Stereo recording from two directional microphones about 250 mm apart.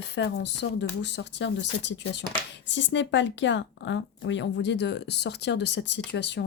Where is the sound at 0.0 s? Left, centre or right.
Left.